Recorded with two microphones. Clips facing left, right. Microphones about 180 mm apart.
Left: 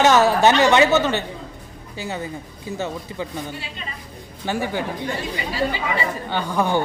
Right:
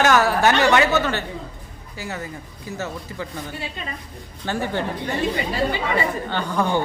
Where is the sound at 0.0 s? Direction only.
20° left (ahead or behind).